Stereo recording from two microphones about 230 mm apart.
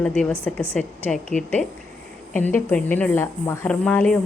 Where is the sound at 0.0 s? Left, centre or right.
Centre.